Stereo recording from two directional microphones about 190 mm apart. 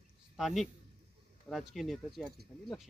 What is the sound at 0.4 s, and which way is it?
Speech, centre (ahead or behind).